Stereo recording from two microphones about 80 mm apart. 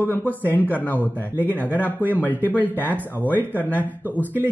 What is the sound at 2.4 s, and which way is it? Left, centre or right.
Music, right.